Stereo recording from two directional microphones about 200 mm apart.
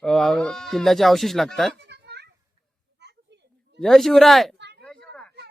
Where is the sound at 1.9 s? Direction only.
55° right (ahead or behind).